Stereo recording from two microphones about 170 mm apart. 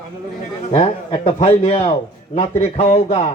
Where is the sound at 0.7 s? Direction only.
35° left (ahead or behind).